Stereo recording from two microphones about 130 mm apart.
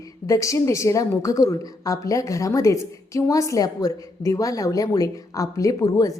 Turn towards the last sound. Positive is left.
turn(degrees=25)  # may be behind; listen again after turning